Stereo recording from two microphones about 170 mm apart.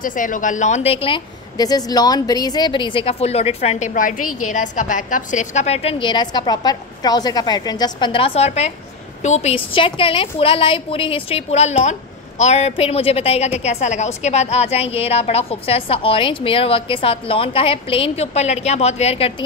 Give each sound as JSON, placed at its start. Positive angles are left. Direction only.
{"t": 0.0, "sound": "a woman's voice", "side_deg": 50}